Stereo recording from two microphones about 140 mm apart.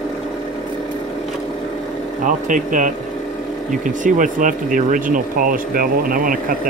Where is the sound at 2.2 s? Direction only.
70° right (ahead or behind).